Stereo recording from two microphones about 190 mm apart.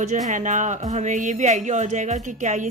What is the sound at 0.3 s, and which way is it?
Speech, 40° right (ahead or behind).